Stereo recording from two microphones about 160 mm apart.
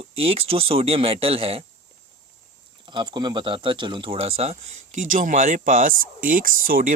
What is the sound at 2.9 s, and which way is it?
Speech, 30° right (ahead or behind).